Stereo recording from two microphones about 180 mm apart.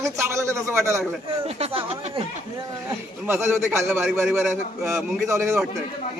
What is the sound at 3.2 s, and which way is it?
A man's voice, 15° right (ahead or behind).